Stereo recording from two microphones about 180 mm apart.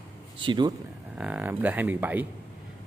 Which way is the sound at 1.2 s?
10° right (ahead or behind).